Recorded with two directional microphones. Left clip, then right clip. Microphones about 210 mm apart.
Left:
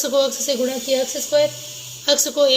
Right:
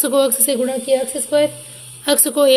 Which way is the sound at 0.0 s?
45° right (ahead or behind).